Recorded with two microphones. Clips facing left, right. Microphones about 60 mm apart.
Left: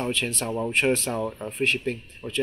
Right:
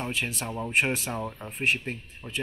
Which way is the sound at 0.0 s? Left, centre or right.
Centre.